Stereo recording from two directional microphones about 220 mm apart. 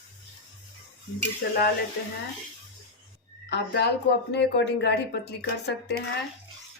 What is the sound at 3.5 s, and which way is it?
Speech, 50° left (ahead or behind).